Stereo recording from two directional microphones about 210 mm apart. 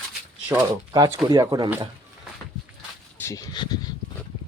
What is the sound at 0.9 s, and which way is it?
Speech, 20° right (ahead or behind).